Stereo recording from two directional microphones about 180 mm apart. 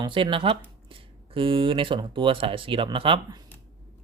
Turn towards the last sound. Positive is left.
turn(degrees=-30)  # may be behind; listen again after turning